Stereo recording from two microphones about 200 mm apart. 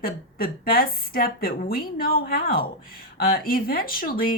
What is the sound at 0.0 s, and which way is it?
A woman's voice, 45° left (ahead or behind).